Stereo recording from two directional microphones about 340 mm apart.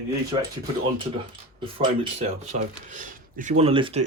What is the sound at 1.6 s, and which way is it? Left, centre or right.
Speech, centre.